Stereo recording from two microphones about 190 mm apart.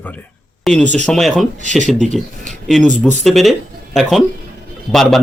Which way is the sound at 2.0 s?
Centre (ahead or behind).